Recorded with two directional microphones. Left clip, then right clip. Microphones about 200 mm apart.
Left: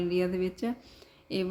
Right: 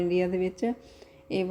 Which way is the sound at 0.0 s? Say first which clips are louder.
Right 3 dB; 10° right (ahead or behind).